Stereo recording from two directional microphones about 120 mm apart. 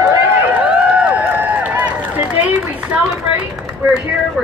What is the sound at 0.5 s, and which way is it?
Run, 10° right (ahead or behind).